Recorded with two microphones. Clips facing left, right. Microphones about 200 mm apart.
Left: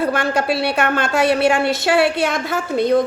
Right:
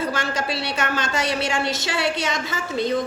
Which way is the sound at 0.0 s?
60° left (ahead or behind).